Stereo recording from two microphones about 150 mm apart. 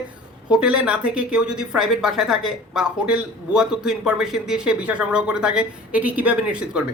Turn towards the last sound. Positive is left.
turn(degrees=-10)  # may be behind; listen again after turning